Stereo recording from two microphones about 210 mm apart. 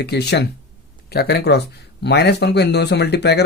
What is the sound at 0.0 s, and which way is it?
A man's voice, 50° left (ahead or behind).